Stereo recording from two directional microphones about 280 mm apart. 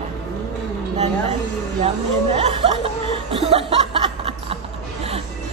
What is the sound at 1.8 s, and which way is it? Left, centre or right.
Speech, right.